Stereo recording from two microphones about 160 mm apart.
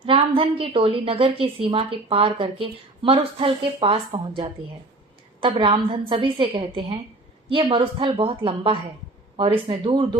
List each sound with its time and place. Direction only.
0.0 s a woman's voice: 35° right (ahead or behind)